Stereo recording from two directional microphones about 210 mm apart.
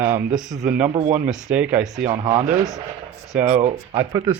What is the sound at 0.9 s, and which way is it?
Speech, 30° right (ahead or behind).